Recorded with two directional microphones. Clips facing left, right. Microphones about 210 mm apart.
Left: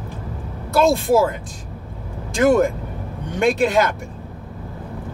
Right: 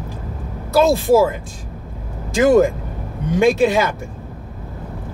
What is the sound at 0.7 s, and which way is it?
Speech, centre (ahead or behind).